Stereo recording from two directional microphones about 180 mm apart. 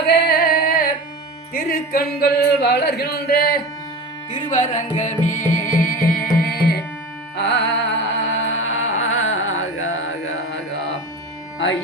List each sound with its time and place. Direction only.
0.1 s music: 55° left (ahead or behind)
1.5 s speech: 55° left (ahead or behind)
4.4 s music: 45° left (ahead or behind); by 6.8 s 60° left (ahead or behind)
7.3 s carnatic music: 75° left (ahead or behind)
8.2 s music: 90° left